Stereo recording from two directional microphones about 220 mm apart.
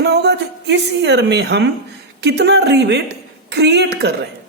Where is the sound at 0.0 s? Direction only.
50° right (ahead or behind).